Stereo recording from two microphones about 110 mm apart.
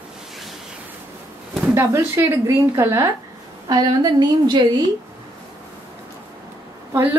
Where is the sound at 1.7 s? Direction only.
25° right (ahead or behind).